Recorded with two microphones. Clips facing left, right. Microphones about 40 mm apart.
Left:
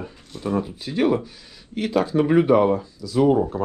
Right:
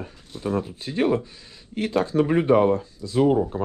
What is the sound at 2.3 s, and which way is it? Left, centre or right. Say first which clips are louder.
Speech: left 2 dB; left.